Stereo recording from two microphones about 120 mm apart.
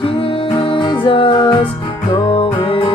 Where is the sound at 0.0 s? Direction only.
50° left (ahead or behind).